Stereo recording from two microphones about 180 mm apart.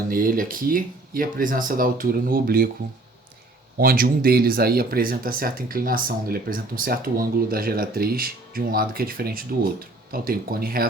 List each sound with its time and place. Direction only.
0.1 s speech: 50° right (ahead or behind)
3.8 s speech: 55° right (ahead or behind)